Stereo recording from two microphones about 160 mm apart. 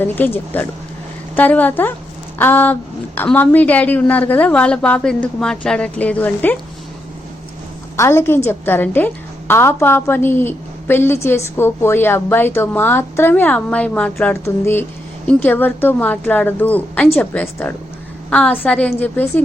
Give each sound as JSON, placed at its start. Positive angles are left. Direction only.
{"t": 0.0, "sound": "a woman's voice", "side_deg": 10}
{"t": 7.9, "sound": "a woman's voice", "side_deg": 15}